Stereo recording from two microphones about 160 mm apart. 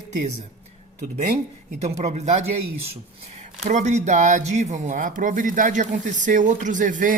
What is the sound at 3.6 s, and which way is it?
Speech, 45° right (ahead or behind).